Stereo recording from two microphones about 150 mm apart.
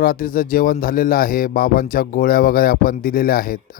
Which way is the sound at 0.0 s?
75° left (ahead or behind).